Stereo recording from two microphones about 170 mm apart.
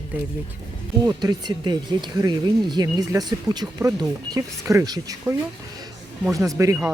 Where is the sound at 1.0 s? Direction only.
25° right (ahead or behind).